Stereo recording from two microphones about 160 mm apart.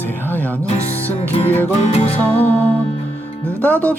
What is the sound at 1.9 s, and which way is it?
Music, 40° left (ahead or behind).